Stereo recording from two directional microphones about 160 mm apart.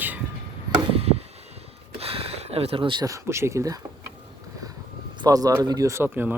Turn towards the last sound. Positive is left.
turn(degrees=-10)  # may be behind; listen again after turning